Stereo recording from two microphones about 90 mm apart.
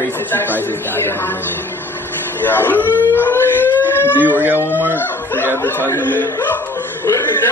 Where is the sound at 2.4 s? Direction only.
20° left (ahead or behind).